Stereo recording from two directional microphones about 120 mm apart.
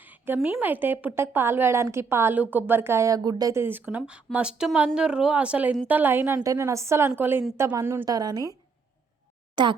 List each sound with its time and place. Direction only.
0.0 s a sound: 15° right (ahead or behind)
0.6 s a woman's voice: 15° right (ahead or behind); by 3.6 s 30° right (ahead or behind)
3.6 s a woman's voice: 15° right (ahead or behind)
8.0 s a woman's voice: 35° right (ahead or behind)
9.6 s a woman's voice: 40° right (ahead or behind)